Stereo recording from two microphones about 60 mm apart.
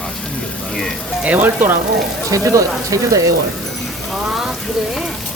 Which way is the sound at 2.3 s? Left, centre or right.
Right.